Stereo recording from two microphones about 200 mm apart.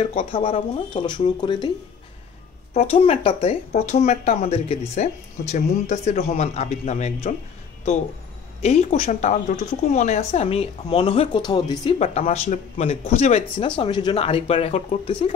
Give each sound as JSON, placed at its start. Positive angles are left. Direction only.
{"t": 0.0, "sound": "speech", "side_deg": 30}
{"t": 2.7, "sound": "speech", "side_deg": 30}
{"t": 8.6, "sound": "speech", "side_deg": 35}
{"t": 12.0, "sound": "speech", "side_deg": 30}